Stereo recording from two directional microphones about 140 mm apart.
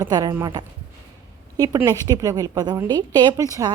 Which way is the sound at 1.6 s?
25° right (ahead or behind).